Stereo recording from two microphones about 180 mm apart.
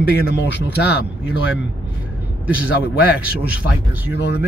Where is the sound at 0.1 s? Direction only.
65° left (ahead or behind).